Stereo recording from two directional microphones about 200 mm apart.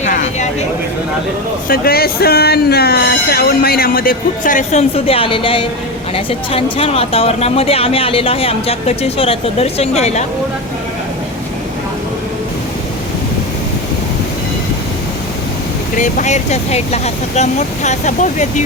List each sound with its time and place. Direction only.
0.0 s a sound: 35° left (ahead or behind)
1.6 s speech: 50° left (ahead or behind); by 10.2 s 35° left (ahead or behind)
16.0 s speech: 40° left (ahead or behind)